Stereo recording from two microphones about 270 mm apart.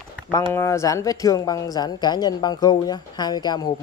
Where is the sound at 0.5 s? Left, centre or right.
Centre.